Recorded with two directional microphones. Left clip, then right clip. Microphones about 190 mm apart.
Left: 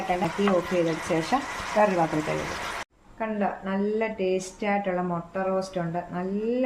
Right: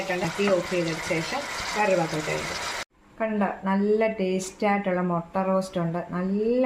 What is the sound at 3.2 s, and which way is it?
Speech, 35° right (ahead or behind).